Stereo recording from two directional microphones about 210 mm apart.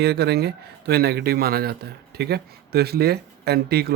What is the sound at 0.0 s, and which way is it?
Speech, 50° right (ahead or behind).